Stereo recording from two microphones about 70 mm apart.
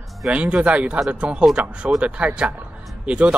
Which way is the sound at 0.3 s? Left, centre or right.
Centre.